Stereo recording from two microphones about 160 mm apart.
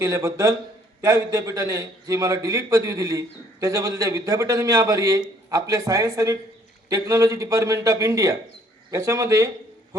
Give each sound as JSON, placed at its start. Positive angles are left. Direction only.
{"t": 0.0, "sound": "a man's voice", "side_deg": -20}